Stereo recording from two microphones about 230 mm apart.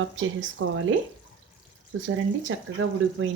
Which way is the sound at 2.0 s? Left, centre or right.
Right.